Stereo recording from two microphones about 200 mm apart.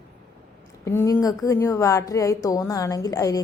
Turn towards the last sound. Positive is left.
turn(degrees=15)  # may be behind; listen again after turning